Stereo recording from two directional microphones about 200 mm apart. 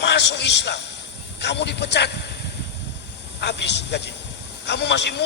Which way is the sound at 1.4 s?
60° left (ahead or behind).